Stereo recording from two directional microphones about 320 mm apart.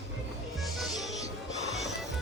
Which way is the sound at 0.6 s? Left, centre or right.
Centre.